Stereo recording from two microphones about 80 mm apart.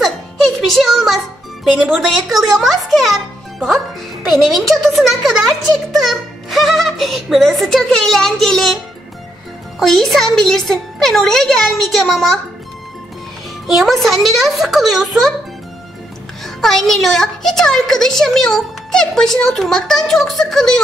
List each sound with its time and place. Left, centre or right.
0.7 s music: centre
2.0 s a woman's voice: centre
9.8 s a woman's voice: centre
13.7 s a woman's voice: centre
16.4 s a woman's voice: centre